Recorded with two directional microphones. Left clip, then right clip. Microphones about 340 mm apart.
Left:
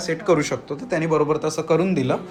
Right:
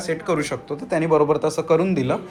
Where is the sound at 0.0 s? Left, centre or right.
Centre.